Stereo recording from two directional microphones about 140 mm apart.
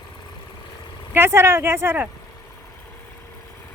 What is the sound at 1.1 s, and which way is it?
Speech, 15° right (ahead or behind).